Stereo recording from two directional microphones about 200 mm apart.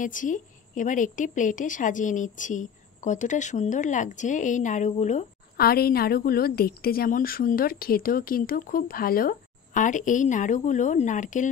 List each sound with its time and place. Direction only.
0.0 s a woman's voice: 40° left (ahead or behind)